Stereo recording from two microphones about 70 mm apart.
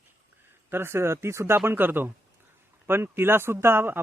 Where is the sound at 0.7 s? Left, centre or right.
Right.